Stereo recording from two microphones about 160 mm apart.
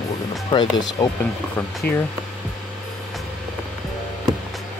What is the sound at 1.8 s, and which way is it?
Speech, 10° left (ahead or behind).